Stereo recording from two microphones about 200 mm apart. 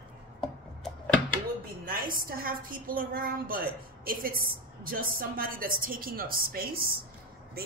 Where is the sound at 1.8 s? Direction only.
45° right (ahead or behind).